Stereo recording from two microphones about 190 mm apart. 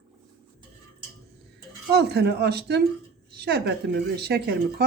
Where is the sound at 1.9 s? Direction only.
60° right (ahead or behind).